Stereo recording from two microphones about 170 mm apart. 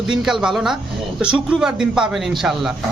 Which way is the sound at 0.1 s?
5° right (ahead or behind).